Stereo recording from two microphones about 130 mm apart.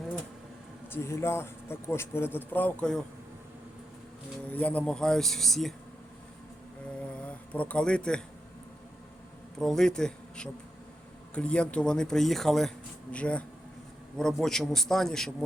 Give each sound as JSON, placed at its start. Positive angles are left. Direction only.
{"t": 0.9, "sound": "speech", "side_deg": 20}
{"t": 4.4, "sound": "speech", "side_deg": 10}
{"t": 7.0, "sound": "a sound", "side_deg": 10}
{"t": 9.6, "sound": "speech", "side_deg": 5}